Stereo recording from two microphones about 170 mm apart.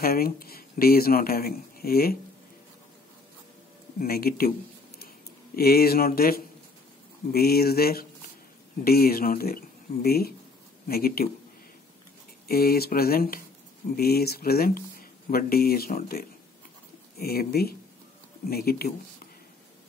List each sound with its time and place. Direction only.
0.0 s speech: 60° left (ahead or behind)
4.0 s speech: 60° left (ahead or behind)
5.6 s speech: 65° left (ahead or behind)
12.4 s speech: 65° left (ahead or behind)